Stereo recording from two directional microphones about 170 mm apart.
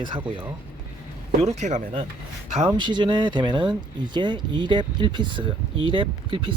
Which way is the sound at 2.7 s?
25° right (ahead or behind).